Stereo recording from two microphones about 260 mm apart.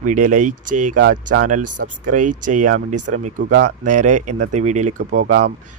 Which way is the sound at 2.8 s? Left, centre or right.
Right.